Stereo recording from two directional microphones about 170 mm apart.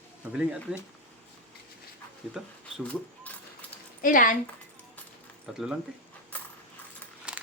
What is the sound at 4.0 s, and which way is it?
Speech, 50° left (ahead or behind).